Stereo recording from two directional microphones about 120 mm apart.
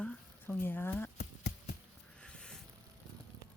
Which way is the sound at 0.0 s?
15° left (ahead or behind).